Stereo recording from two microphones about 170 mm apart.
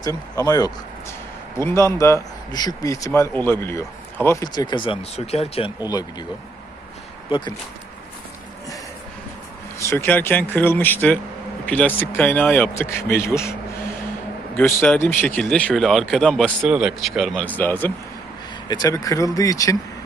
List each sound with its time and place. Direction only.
0.0 s speech: 20° left (ahead or behind)
4.5 s speech: 25° left (ahead or behind)
5.9 s speech: 25° left (ahead or behind)
7.3 s speech: 30° left (ahead or behind)
9.7 s speech: 15° left (ahead or behind)
18.7 s speech: 20° left (ahead or behind)